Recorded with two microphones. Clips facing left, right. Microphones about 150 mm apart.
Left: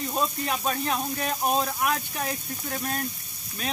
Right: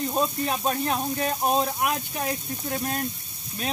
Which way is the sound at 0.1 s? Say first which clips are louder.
Right 2 dB; 25° right (ahead or behind).